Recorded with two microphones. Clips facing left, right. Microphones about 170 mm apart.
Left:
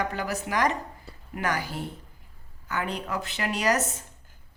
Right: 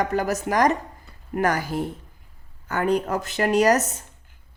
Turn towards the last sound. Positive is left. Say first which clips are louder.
# right 7 dB
turn(degrees=-45)  # may be behind; listen again after turning